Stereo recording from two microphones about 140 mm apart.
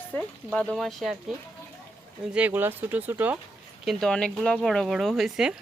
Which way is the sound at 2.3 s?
10° right (ahead or behind).